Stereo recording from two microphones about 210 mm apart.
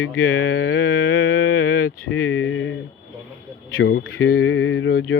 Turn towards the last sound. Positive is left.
turn(degrees=65)  # may be behind; listen again after turning